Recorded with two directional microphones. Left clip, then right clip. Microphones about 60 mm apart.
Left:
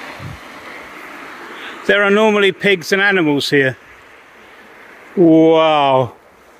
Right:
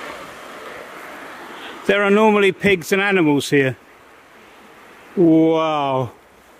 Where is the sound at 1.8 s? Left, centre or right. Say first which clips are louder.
Left 3 dB; right.